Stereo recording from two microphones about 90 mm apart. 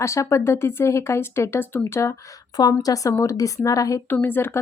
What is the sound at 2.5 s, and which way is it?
A woman's voice, 45° left (ahead or behind).